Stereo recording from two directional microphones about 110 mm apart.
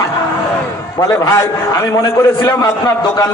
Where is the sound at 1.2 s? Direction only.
30° left (ahead or behind).